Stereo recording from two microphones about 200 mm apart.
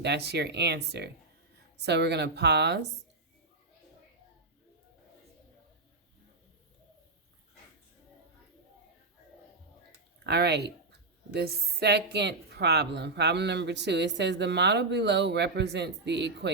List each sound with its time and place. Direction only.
0.0 s a woman's voice: 55° right (ahead or behind)
10.2 s a woman's voice: 55° right (ahead or behind)